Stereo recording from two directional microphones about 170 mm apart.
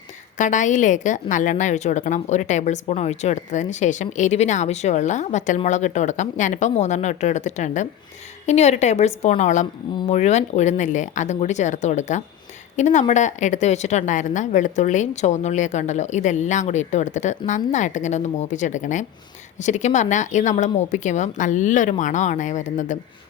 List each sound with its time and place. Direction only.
0.3 s a woman's voice: 45° left (ahead or behind)